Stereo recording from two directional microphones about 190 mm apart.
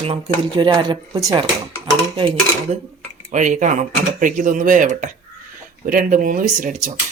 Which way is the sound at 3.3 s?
40° right (ahead or behind).